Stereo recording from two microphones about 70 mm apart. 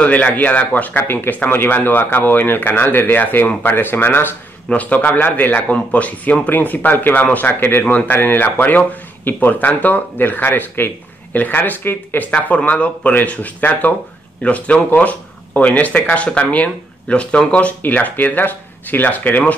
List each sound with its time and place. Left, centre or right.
0.0 s speech: left